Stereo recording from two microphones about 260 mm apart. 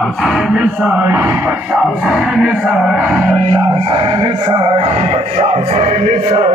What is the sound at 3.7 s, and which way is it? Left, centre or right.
Speech, centre.